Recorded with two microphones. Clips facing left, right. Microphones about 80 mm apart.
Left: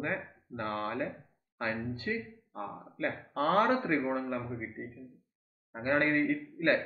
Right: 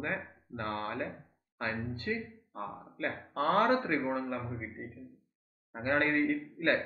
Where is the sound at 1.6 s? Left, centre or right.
Centre.